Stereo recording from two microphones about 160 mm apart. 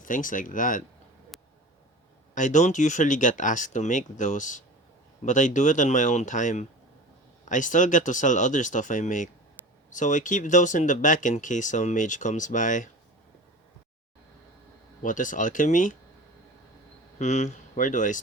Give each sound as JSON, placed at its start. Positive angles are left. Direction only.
{"t": 0.0, "sound": "speech", "side_deg": 55}
{"t": 1.3, "sound": "a sound", "side_deg": 0}
{"t": 2.3, "sound": "speech", "side_deg": 50}
{"t": 15.0, "sound": "speech", "side_deg": 55}
{"t": 17.2, "sound": "speech", "side_deg": 45}